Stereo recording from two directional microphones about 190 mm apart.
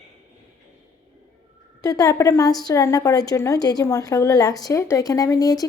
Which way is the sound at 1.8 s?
20° left (ahead or behind).